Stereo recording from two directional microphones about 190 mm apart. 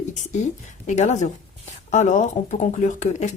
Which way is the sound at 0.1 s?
40° left (ahead or behind).